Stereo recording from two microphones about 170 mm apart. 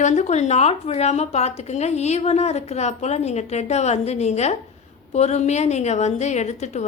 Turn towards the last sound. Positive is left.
turn(degrees=40)  # may be behind; listen again after turning